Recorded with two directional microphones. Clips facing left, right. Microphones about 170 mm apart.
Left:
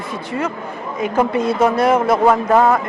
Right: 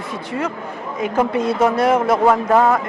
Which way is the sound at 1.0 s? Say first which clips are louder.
Left 1 dB; 15° left (ahead or behind).